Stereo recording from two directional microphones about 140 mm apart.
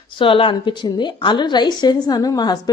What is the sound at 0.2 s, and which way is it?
A woman's voice, 40° left (ahead or behind).